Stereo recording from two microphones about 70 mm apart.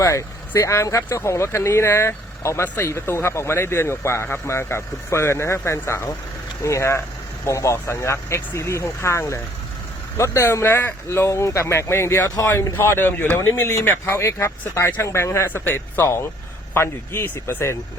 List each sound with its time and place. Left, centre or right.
0.0 s speech: left
13.7 s speech: left
14.8 s speech: left
15.0 s speech: left